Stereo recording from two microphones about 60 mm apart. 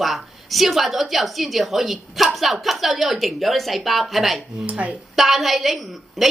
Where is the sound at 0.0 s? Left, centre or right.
Centre.